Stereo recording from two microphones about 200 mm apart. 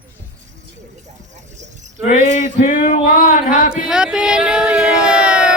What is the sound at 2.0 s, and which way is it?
A man's voice, 35° left (ahead or behind).